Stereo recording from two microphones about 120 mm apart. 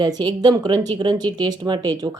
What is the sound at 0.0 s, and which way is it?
Speech, 35° right (ahead or behind).